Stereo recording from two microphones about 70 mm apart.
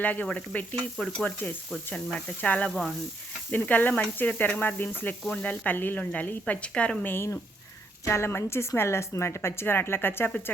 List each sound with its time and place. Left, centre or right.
0.0 s speech: left
0.9 s a woman's voice: centre
2.6 s speech: centre
3.5 s a woman's voice: left
7.0 s speech: left